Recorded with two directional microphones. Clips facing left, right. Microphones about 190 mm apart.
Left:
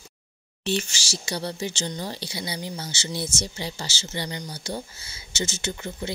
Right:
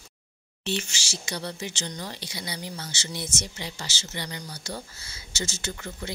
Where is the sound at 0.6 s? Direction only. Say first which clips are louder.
Left 4 dB; 40° left (ahead or behind).